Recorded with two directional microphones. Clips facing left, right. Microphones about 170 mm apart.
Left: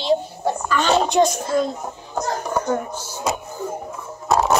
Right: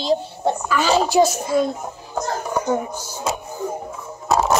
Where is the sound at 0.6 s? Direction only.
5° right (ahead or behind).